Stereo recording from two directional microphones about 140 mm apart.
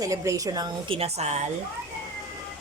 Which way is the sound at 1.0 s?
50° right (ahead or behind).